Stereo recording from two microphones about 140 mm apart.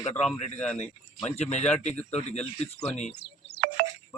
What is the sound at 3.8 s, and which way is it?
Music, 90° right.